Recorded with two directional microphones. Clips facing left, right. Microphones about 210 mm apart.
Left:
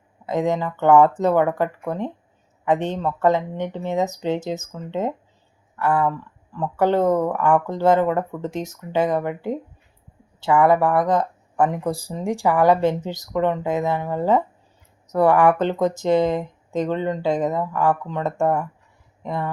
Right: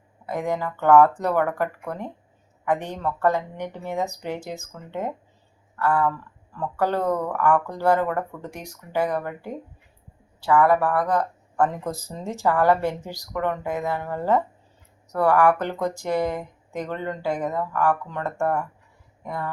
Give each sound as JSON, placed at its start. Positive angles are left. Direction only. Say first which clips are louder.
{"t": 0.3, "sound": "speech", "louder": "left 5 dB", "side_deg": 20}